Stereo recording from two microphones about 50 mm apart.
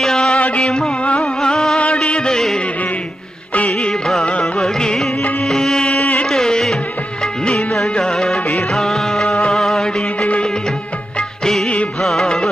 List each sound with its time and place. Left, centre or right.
0.0 s music: centre
4.2 s music: centre
5.9 s carnatic music: left
6.2 s music: centre
10.2 s music: left
11.6 s music: left
12.0 s music: centre